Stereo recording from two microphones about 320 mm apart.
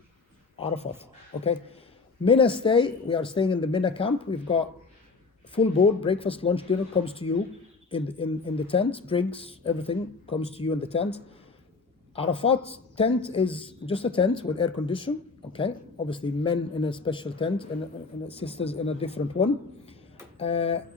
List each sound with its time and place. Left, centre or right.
0.5 s speech: centre
2.2 s speech: centre
12.1 s speech: centre